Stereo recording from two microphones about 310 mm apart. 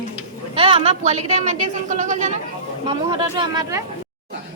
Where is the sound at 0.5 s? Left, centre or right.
Centre.